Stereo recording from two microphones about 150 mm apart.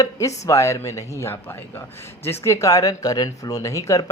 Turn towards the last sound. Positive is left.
turn(degrees=20)  # may be behind; listen again after turning